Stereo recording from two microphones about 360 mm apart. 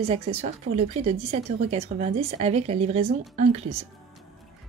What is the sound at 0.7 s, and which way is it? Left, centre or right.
Speech, centre.